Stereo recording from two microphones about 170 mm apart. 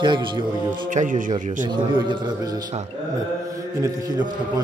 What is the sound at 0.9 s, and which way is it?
Speech, 50° right (ahead or behind).